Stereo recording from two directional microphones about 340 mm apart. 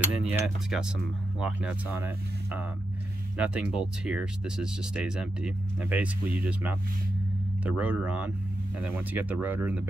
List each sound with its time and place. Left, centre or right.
0.0 s speech: centre